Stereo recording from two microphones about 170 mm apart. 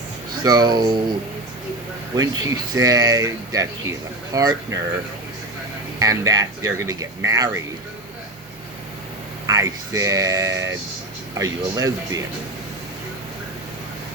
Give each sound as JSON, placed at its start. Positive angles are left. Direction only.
{"t": 0.4, "sound": "speech", "side_deg": -25}
{"t": 2.1, "sound": "speech", "side_deg": -20}
{"t": 6.0, "sound": "speech", "side_deg": -20}
{"t": 9.5, "sound": "speech", "side_deg": -20}